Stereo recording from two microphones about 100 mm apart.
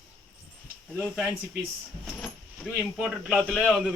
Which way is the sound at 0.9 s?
5° right (ahead or behind).